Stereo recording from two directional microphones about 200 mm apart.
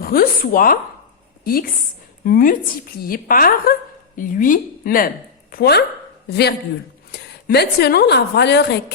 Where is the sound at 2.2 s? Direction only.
45° left (ahead or behind).